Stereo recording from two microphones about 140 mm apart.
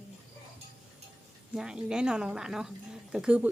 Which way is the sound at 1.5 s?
5° right (ahead or behind).